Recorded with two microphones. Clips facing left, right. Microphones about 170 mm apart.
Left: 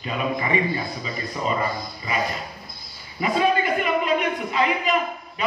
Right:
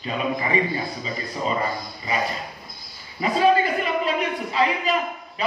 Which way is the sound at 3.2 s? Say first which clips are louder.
Right 2 dB; 35° right (ahead or behind).